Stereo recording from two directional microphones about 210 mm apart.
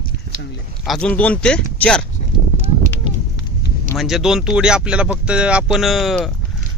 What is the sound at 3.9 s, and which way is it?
Speech, centre (ahead or behind).